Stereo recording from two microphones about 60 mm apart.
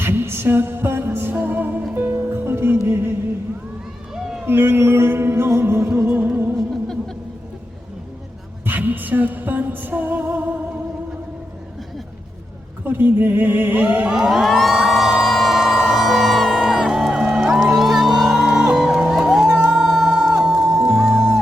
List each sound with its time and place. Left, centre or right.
0.0 s music: right
4.1 s run: centre
4.4 s music: right
6.1 s music: right
6.6 s music: centre
8.6 s music: right
12.8 s a sound: right
14.1 s crowd: centre
17.1 s music: centre
19.5 s music: right
19.7 s music: centre